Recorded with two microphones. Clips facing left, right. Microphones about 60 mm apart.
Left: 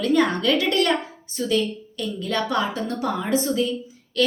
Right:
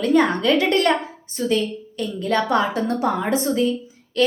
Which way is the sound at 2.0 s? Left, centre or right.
Right.